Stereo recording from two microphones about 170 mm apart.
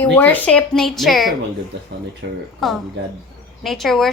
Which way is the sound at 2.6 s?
Centre (ahead or behind).